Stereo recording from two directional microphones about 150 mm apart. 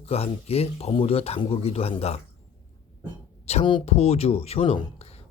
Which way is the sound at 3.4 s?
40° left (ahead or behind).